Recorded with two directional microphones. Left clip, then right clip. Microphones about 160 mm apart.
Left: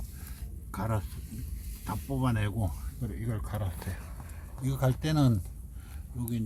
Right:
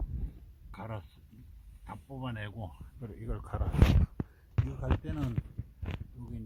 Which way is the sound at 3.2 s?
40° right (ahead or behind).